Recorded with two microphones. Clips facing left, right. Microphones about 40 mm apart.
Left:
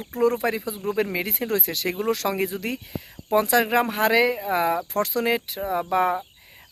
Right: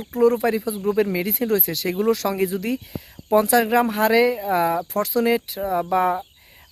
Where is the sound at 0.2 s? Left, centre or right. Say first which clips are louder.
Right 4 dB; left.